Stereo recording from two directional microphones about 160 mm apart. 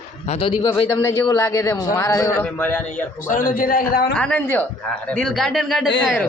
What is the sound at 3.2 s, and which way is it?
Speech, 55° left (ahead or behind).